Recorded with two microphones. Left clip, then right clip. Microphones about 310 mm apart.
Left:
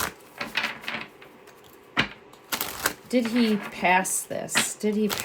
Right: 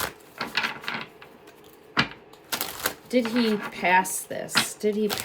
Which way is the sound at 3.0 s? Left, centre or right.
Centre.